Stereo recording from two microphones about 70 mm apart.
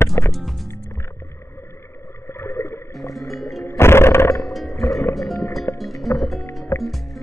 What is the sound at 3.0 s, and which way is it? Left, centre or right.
Music, left.